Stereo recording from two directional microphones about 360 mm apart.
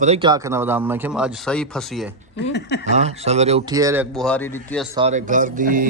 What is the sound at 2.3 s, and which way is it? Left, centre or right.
Speech, left.